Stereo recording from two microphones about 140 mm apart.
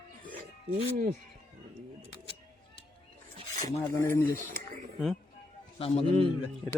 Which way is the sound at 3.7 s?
20° left (ahead or behind).